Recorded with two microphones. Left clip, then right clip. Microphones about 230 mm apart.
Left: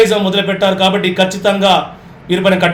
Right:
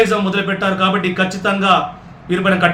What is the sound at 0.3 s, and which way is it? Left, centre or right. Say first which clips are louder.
A man's voice: left 5 dB; centre.